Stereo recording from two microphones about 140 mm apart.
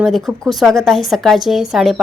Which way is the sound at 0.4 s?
Centre (ahead or behind).